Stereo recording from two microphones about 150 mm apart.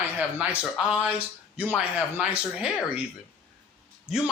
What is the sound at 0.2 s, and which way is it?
A man's voice, 10° right (ahead or behind).